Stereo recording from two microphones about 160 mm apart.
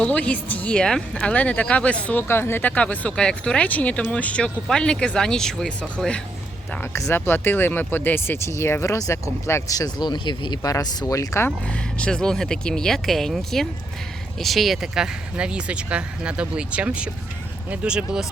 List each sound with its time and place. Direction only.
0.0 s speech: 10° left (ahead or behind)
11.9 s speech: 5° left (ahead or behind)